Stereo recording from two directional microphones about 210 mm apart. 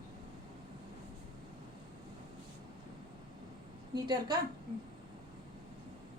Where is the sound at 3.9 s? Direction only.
20° right (ahead or behind).